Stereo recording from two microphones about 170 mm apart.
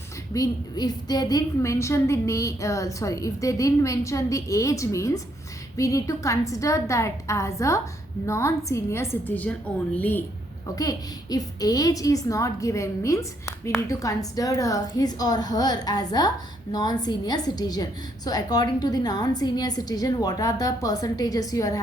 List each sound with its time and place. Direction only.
0.3 s a woman's voice: 20° left (ahead or behind)
10.8 s a woman's voice: 20° left (ahead or behind)